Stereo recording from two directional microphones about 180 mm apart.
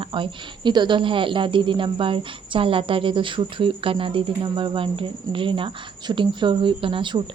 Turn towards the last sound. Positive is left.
turn(degrees=-25)  # may be behind; listen again after turning